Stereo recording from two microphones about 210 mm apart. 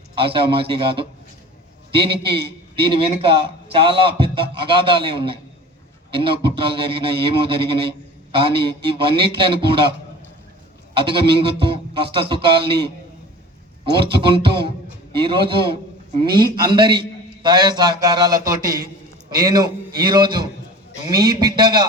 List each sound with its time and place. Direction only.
0.2 s a man's voice: 25° right (ahead or behind)
10.9 s a man's voice: 25° right (ahead or behind)
13.9 s a man's voice: 25° right (ahead or behind)